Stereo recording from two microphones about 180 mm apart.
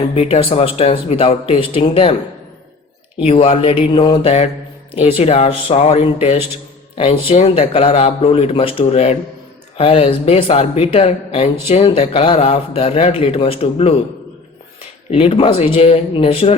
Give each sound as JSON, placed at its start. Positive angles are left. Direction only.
{"t": 0.1, "sound": "a man's voice", "side_deg": 35}
{"t": 3.2, "sound": "a man's voice", "side_deg": 35}
{"t": 15.1, "sound": "a man's voice", "side_deg": 30}